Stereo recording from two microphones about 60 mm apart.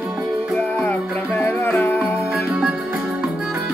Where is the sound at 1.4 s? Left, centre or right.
Left.